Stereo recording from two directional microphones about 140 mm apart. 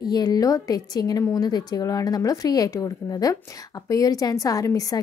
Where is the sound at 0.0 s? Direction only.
30° left (ahead or behind).